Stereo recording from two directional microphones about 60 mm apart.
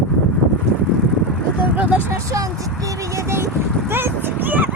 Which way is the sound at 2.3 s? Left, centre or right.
Right.